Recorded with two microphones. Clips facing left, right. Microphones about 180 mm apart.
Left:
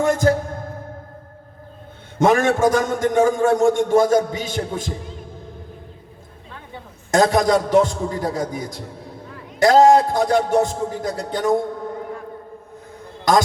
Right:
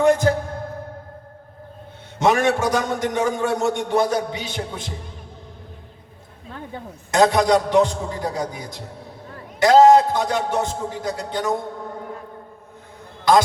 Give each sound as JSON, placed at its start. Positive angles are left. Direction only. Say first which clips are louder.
{"t": 0.0, "sound": "music", "louder": "right 1 dB", "side_deg": 45}
{"t": 2.1, "sound": "a man's voice", "louder": "left 2 dB", "side_deg": 50}
{"t": 7.1, "sound": "a man's voice", "louder": "even", "side_deg": 45}
{"t": 13.3, "sound": "a man's voice", "louder": "right 1 dB", "side_deg": 45}